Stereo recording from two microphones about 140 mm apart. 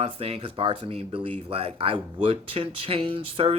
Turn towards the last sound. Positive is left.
turn(degrees=-40)  # may be behind; listen again after turning